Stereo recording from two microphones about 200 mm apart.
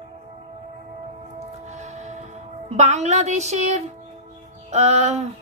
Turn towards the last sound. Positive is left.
turn(degrees=-35)  # may be behind; listen again after turning